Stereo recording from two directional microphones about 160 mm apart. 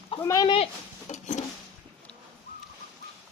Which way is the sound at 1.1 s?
50° left (ahead or behind).